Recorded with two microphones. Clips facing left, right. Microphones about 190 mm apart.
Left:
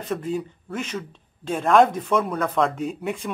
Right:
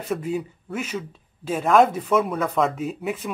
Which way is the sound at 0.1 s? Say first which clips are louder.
Right 1 dB; 5° right (ahead or behind).